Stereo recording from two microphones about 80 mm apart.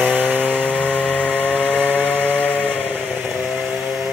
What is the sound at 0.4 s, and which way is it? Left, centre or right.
Chainsaw, centre.